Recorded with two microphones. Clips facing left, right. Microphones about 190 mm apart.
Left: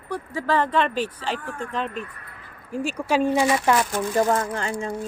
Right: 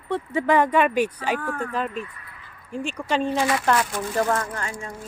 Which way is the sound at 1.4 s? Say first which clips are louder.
Right 5 dB; 75° right (ahead or behind).